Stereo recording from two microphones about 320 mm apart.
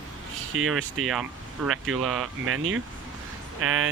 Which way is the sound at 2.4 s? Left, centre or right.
Right.